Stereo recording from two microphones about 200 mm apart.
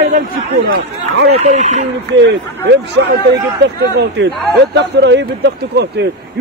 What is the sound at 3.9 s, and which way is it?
Speech, 60° right (ahead or behind).